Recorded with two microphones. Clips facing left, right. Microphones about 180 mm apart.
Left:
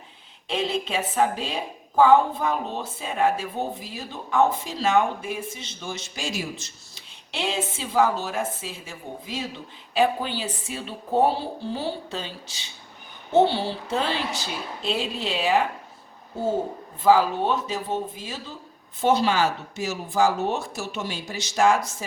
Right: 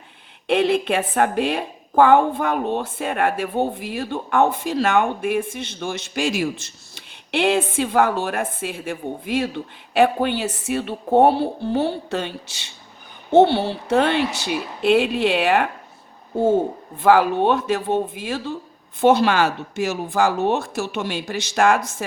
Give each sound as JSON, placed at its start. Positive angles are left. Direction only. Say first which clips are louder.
{"t": 0.4, "sound": "speech", "louder": "right 8 dB", "side_deg": -60}
{"t": 13.4, "sound": "speech", "louder": "right 5 dB", "side_deg": -60}
{"t": 17.0, "sound": "speech", "louder": "right 3 dB", "side_deg": -65}